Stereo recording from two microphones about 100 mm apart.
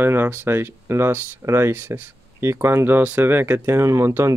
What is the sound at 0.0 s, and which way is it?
A woman's voice, 20° right (ahead or behind).